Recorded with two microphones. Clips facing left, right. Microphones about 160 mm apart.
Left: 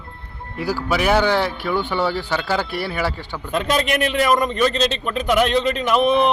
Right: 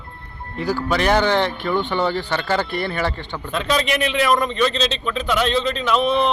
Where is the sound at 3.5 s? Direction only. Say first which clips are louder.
Left 1 dB; 45° left (ahead or behind).